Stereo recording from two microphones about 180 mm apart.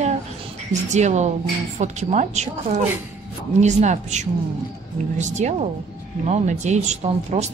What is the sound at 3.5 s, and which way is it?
A woman's voice, 40° right (ahead or behind).